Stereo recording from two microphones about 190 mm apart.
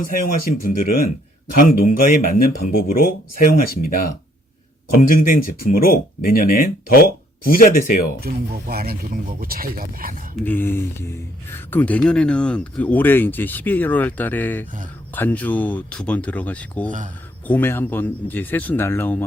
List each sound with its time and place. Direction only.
0.0 s speech: 45° left (ahead or behind)
8.2 s speech: 50° right (ahead or behind)
10.4 s speech: 10° left (ahead or behind)